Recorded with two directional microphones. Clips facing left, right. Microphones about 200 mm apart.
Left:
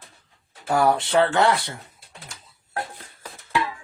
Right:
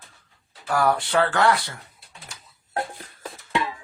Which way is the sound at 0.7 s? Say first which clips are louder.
Left 2 dB; 25° left (ahead or behind).